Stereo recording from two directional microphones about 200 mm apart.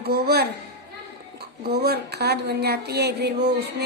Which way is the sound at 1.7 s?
55° right (ahead or behind).